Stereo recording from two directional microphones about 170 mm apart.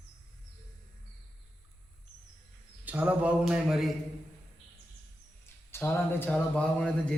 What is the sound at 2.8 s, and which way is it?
A man's voice, 10° right (ahead or behind).